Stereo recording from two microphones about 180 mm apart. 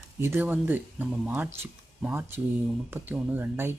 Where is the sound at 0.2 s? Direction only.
10° right (ahead or behind).